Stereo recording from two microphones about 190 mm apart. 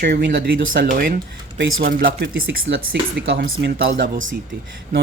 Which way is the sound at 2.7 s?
75° right (ahead or behind).